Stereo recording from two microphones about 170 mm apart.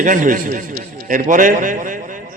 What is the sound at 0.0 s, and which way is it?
A man's voice, 50° right (ahead or behind).